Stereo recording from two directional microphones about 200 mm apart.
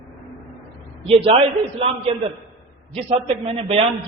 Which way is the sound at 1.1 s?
30° right (ahead or behind).